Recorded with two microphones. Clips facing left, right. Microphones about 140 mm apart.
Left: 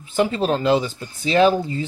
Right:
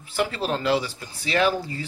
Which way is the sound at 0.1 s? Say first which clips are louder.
Left 6 dB; 20° left (ahead or behind).